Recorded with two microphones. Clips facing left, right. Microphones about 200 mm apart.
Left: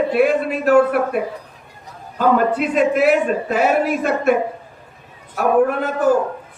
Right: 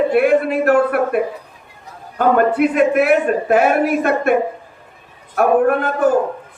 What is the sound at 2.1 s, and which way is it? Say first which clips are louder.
A man's voice: right 2 dB; 60° right (ahead or behind).